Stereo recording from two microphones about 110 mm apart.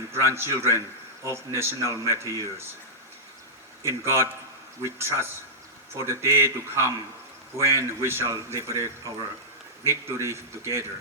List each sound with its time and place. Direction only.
0.1 s speech: 25° right (ahead or behind)
3.8 s speech: 25° right (ahead or behind)